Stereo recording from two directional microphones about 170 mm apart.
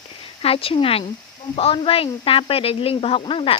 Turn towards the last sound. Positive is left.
turn(degrees=30)  # may be behind; listen again after turning